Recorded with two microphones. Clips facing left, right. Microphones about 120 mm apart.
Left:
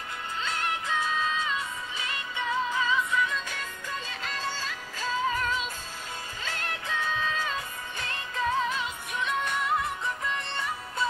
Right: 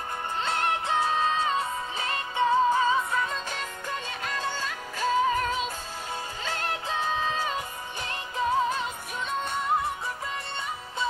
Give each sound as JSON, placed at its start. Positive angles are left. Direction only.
{"t": 0.4, "sound": "music", "side_deg": -30}
{"t": 1.0, "sound": "music", "side_deg": -45}
{"t": 6.5, "sound": "music", "side_deg": -30}
{"t": 8.6, "sound": "music", "side_deg": -45}